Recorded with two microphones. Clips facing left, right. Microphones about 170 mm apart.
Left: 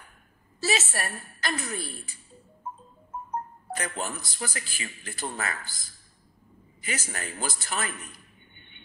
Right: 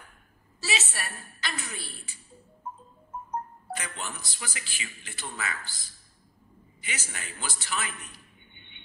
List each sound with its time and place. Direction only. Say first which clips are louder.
0.6 s a woman's voice: left 5 dB; 45° left (ahead or behind)
3.7 s speech: left 5 dB; 40° left (ahead or behind)
8.5 s a sound: even; 40° left (ahead or behind)